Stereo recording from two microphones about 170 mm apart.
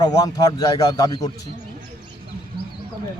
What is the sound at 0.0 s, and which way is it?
Speech, 25° left (ahead or behind).